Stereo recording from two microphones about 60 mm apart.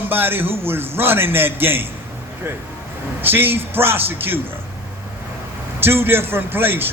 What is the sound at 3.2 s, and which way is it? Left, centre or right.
A man's voice, right.